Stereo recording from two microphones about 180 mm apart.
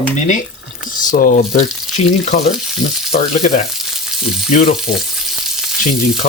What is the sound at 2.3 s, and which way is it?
Speech, 40° left (ahead or behind).